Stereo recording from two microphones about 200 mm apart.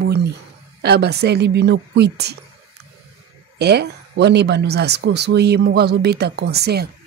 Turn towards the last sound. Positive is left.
turn(degrees=-55)  # may be behind; listen again after turning